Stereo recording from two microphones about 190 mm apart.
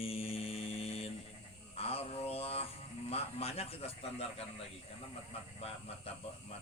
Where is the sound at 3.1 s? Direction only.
30° left (ahead or behind).